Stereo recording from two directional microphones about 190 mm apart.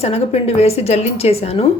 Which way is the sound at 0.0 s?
30° left (ahead or behind).